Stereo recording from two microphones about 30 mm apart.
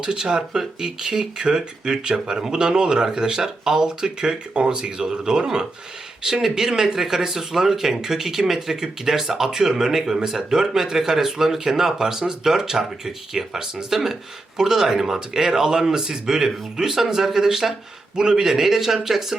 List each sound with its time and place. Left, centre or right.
0.0 s speech: right
6.4 s speech: centre